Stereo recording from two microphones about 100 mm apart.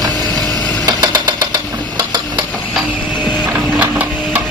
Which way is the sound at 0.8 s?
45° right (ahead or behind).